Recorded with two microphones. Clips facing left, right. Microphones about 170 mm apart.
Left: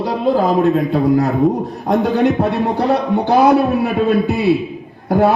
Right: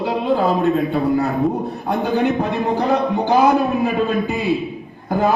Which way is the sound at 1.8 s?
90° left.